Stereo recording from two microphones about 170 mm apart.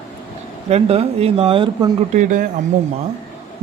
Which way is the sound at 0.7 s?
35° right (ahead or behind).